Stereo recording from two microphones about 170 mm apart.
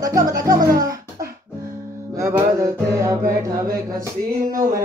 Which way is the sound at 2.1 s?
15° right (ahead or behind).